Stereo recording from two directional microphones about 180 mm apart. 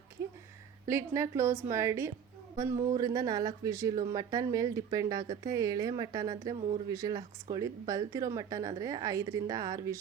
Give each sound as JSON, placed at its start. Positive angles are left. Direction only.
{"t": 0.9, "sound": "a woman's voice", "side_deg": -15}